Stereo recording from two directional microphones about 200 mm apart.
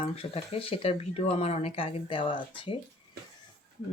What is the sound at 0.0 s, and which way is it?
Speech, 30° left (ahead or behind).